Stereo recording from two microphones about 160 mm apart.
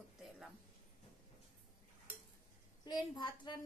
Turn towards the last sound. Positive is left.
turn(degrees=30)  # may be behind; listen again after turning